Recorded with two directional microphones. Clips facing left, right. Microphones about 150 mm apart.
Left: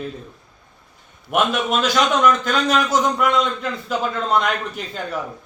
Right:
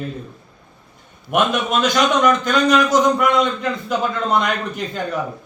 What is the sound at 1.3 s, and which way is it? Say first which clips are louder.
A man's voice: right 1 dB; 5° left (ahead or behind).